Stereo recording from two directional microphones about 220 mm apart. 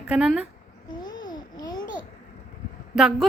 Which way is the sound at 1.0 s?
20° left (ahead or behind).